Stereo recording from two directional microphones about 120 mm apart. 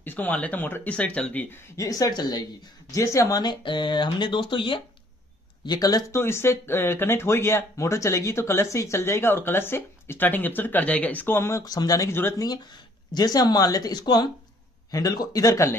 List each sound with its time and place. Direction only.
0.0 s speech: 15° left (ahead or behind)
1.8 s speech: 30° left (ahead or behind); by 4.8 s 45° left (ahead or behind)
5.7 s speech: 30° left (ahead or behind)
11.6 s speech: 35° left (ahead or behind)
13.1 s speech: 35° left (ahead or behind)